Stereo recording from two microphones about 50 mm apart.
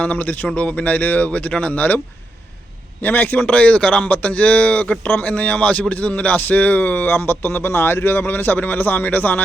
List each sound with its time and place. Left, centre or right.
0.0 s a man's voice: left
3.0 s a man's voice: left